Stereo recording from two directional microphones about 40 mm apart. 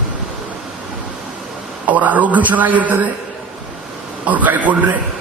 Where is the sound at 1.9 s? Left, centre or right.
Right.